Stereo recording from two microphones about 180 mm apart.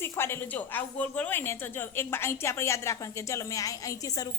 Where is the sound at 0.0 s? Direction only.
15° left (ahead or behind).